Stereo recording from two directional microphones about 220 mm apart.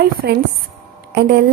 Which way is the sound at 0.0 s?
45° right (ahead or behind).